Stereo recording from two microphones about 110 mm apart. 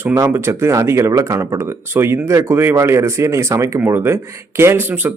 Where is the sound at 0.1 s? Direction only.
25° right (ahead or behind).